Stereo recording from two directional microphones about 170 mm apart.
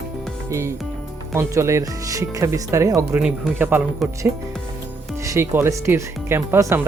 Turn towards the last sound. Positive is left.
turn(degrees=-15)  # may be behind; listen again after turning